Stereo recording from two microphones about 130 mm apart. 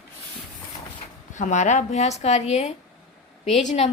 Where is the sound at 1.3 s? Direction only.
70° left (ahead or behind); by 3.9 s 50° left (ahead or behind).